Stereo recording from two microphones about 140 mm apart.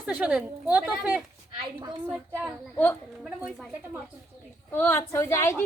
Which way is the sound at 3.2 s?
5° right (ahead or behind).